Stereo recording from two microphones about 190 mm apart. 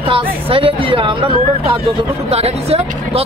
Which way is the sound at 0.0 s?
30° right (ahead or behind).